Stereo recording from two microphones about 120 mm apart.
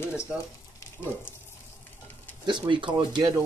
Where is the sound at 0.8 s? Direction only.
20° left (ahead or behind).